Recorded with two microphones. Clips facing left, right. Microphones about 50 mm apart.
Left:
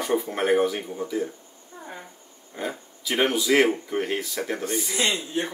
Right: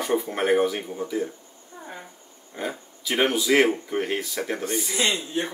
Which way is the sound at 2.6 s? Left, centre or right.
Centre.